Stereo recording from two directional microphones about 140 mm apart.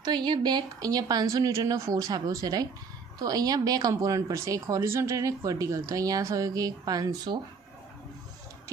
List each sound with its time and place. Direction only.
0.0 s speech: 30° right (ahead or behind)